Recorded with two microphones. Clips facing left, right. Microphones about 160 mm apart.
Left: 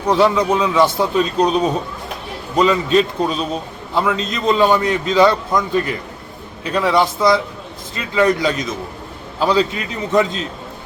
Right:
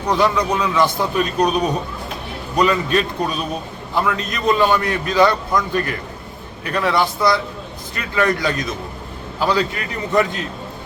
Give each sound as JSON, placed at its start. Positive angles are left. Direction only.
{"t": 0.3, "sound": "a man's voice", "side_deg": 20}